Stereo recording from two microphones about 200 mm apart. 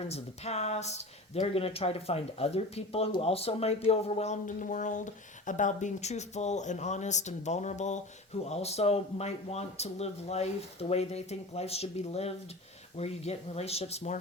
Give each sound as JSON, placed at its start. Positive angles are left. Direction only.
{"t": 0.1, "sound": "speech", "side_deg": 35}